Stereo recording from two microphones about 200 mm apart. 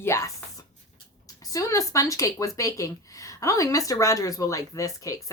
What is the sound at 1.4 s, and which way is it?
Speech, 15° left (ahead or behind).